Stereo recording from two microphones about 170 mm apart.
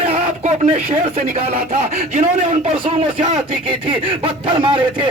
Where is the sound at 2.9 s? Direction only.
35° right (ahead or behind).